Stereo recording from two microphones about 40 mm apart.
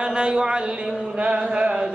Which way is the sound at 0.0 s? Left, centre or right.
Right.